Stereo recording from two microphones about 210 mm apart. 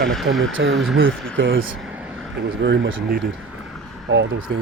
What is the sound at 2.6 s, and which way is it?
Speech, 55° right (ahead or behind).